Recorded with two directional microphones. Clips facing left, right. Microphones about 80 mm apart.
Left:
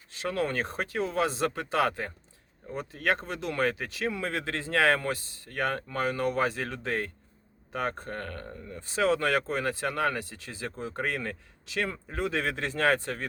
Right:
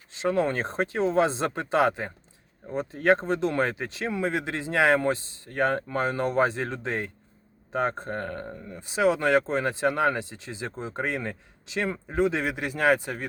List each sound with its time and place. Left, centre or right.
0.1 s speech: right